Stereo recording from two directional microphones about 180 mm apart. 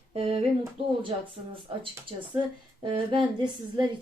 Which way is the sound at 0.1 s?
35° right (ahead or behind).